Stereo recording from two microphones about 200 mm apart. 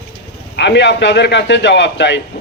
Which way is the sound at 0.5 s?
60° left (ahead or behind).